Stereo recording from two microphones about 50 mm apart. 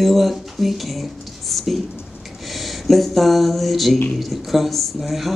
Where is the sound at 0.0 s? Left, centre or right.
Centre.